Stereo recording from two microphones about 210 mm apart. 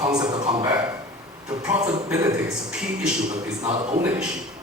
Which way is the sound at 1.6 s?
5° right (ahead or behind).